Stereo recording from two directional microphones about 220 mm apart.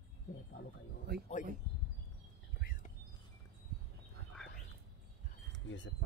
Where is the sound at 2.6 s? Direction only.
40° left (ahead or behind).